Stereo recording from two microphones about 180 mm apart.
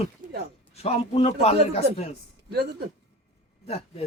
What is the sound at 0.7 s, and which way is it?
A man's voice, 35° left (ahead or behind).